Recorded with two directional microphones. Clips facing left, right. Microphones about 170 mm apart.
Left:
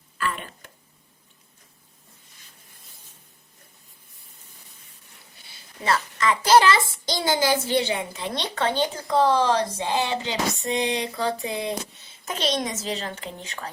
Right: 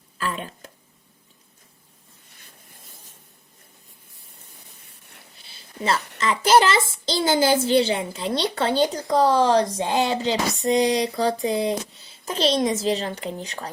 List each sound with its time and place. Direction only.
0.2 s speech: 35° right (ahead or behind)
5.5 s a sound: 25° right (ahead or behind)
6.1 s a child's voice: 25° right (ahead or behind)